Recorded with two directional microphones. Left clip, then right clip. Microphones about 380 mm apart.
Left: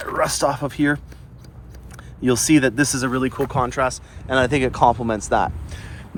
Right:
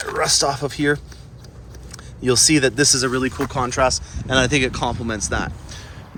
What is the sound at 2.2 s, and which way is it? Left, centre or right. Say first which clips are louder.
Speech: right 1 dB; centre.